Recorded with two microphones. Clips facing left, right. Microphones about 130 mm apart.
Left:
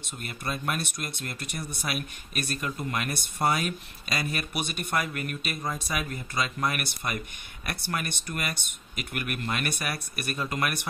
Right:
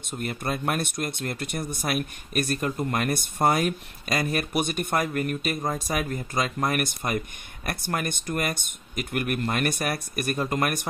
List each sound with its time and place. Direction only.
0.1 s speech: 35° right (ahead or behind)
0.5 s speech: 50° right (ahead or behind)